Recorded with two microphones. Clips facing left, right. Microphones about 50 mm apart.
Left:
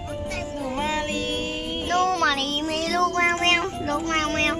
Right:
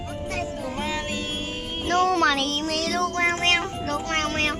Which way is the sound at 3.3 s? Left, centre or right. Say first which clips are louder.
Left 1 dB; left.